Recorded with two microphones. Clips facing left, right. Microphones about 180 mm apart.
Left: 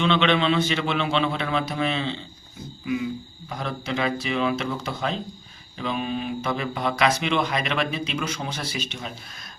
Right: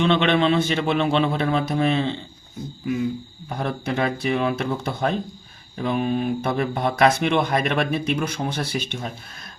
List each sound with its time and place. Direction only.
0.0 s speech: 50° right (ahead or behind)
3.6 s speech: 55° right (ahead or behind)